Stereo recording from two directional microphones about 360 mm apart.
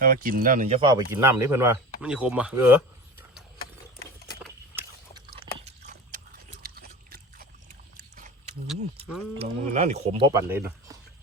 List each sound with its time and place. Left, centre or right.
0.0 s speech: right; by 2.7 s centre
4.4 s a sound: centre; by 7.4 s right
7.9 s pig: right
9.3 s speech: centre